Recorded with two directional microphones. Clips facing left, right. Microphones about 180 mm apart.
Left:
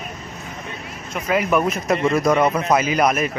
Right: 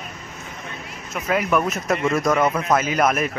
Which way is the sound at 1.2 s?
5° left (ahead or behind).